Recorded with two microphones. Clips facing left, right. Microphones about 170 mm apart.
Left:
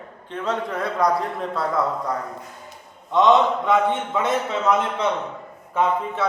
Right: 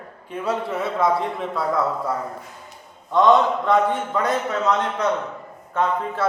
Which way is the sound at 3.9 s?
Centre (ahead or behind).